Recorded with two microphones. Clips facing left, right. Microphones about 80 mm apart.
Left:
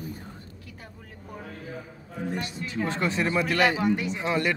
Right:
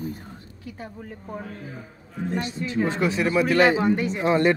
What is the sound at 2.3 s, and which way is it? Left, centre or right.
Speech, right.